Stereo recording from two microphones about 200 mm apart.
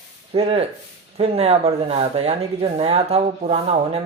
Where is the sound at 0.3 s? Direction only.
30° right (ahead or behind).